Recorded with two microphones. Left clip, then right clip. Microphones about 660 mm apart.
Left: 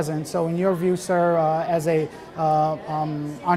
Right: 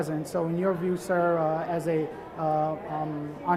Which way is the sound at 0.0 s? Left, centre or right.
Left.